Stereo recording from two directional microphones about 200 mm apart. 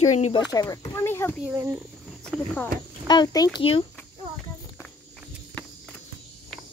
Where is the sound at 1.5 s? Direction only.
10° right (ahead or behind).